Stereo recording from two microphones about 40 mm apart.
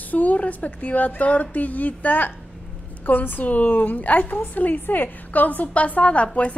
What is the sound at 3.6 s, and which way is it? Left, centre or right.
A woman's voice, left.